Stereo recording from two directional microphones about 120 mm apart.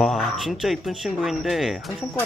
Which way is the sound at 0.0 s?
Centre (ahead or behind).